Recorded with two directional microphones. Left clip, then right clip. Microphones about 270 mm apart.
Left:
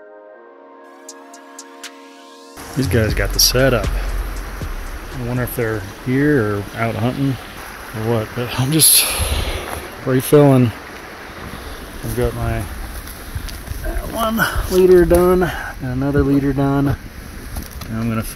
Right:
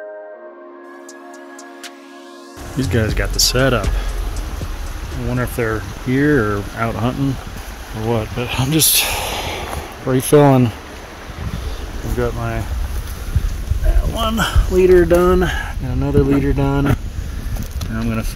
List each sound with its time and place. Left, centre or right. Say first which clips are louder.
2.8 s speech: left 1 dB; centre
5.3 s speech: right 1 dB; centre
12.2 s speech: even; centre
14.1 s speech: left 1 dB; centre